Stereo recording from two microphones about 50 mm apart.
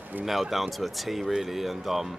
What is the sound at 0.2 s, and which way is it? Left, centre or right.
Speech, centre.